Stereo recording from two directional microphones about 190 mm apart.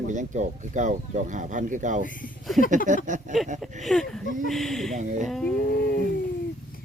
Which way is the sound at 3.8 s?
Centre (ahead or behind).